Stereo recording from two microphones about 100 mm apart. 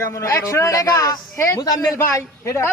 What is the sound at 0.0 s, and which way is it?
A man's voice, 30° left (ahead or behind).